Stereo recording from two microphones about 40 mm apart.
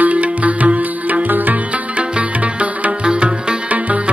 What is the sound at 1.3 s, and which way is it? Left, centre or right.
Music, right.